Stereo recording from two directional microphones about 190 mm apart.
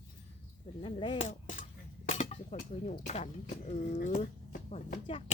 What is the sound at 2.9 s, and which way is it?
Speech, 35° left (ahead or behind).